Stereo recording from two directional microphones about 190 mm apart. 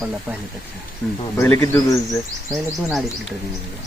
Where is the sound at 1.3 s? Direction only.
15° left (ahead or behind).